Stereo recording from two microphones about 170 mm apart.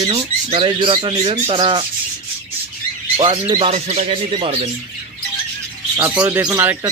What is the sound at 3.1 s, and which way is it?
Speech, 30° right (ahead or behind).